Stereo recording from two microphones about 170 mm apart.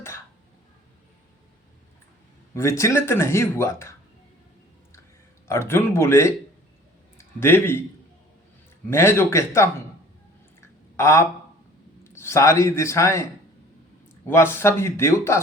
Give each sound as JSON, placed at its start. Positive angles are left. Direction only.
{"t": 2.6, "sound": "speech", "side_deg": 15}
{"t": 5.5, "sound": "speech", "side_deg": 15}
{"t": 7.3, "sound": "speech", "side_deg": 15}
{"t": 8.9, "sound": "speech", "side_deg": 15}
{"t": 10.9, "sound": "speech", "side_deg": 15}
{"t": 14.3, "sound": "speech", "side_deg": 15}